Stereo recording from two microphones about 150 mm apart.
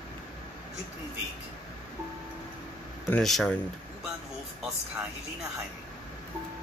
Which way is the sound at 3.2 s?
Centre (ahead or behind).